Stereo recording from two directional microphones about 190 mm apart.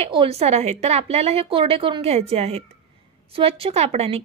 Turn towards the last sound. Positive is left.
turn(degrees=-30)  # may be behind; listen again after turning